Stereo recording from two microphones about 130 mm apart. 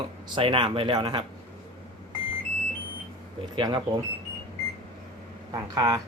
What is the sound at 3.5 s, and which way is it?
Speech, 40° right (ahead or behind).